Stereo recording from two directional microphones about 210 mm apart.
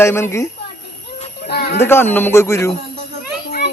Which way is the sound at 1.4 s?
50° left (ahead or behind).